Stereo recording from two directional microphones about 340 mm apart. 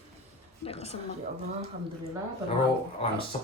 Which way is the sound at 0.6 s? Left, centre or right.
Centre.